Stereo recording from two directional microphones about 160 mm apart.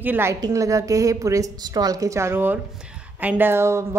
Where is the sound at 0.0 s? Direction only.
15° right (ahead or behind).